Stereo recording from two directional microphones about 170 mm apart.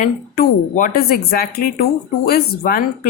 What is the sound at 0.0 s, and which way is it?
Speech, 55° left (ahead or behind).